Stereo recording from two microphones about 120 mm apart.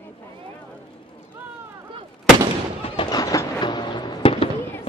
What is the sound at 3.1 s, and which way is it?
Fireworks, 30° left (ahead or behind).